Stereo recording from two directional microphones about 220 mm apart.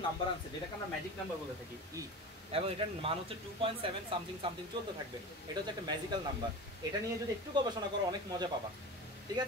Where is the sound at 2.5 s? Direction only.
25° right (ahead or behind).